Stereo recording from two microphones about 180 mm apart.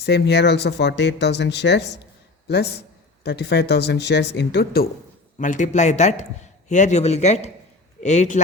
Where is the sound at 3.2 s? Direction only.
65° left (ahead or behind).